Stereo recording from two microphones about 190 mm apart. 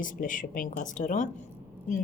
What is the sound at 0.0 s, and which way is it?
A woman's voice, 45° left (ahead or behind).